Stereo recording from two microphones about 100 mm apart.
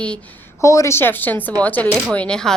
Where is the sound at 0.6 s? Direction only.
30° left (ahead or behind).